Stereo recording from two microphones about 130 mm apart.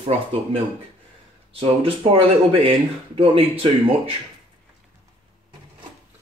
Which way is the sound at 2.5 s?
45° right (ahead or behind).